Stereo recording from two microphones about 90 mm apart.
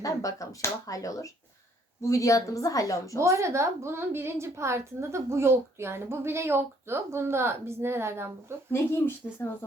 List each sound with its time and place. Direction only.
0.0 s a woman's voice: 40° left (ahead or behind)
3.2 s a woman's voice: 30° right (ahead or behind)
8.7 s speech: 25° left (ahead or behind)